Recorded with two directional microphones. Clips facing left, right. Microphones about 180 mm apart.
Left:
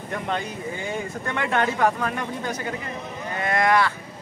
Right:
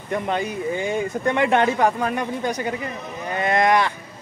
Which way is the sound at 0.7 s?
20° right (ahead or behind).